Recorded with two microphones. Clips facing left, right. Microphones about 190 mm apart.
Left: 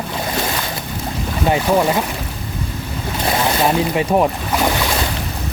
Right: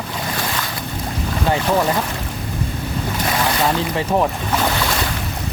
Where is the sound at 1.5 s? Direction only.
15° left (ahead or behind).